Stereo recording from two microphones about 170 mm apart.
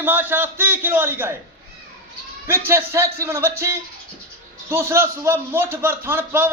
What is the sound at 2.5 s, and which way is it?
Speech, 15° right (ahead or behind).